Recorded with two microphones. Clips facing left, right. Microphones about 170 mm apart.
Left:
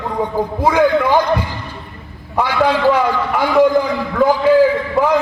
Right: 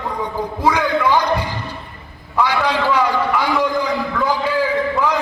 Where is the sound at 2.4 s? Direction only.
50° left (ahead or behind).